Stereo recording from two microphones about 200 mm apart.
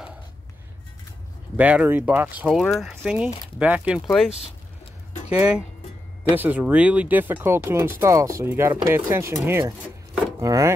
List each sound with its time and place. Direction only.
1.6 s speech: 5° right (ahead or behind)